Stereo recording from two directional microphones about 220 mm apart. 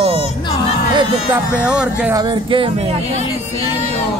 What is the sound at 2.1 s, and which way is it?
Speech, 20° right (ahead or behind).